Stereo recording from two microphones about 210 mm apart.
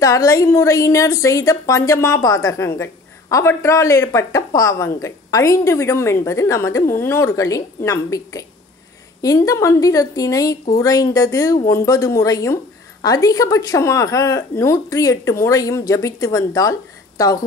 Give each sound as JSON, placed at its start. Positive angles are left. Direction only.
{"t": 0.0, "sound": "a woman's voice", "side_deg": 15}